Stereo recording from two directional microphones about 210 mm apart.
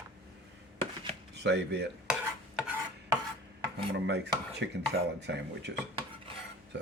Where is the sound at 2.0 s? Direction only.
5° right (ahead or behind).